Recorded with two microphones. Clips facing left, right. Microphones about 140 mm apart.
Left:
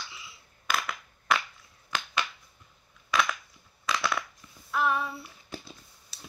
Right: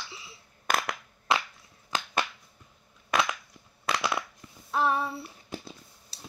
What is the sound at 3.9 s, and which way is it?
Crushing, 15° right (ahead or behind).